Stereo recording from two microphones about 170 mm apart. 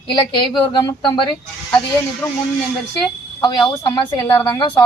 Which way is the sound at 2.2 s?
15° left (ahead or behind).